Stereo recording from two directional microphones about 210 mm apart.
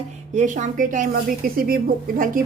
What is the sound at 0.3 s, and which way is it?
A woman's voice, 35° right (ahead or behind).